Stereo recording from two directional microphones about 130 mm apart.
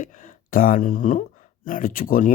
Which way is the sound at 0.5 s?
90° left.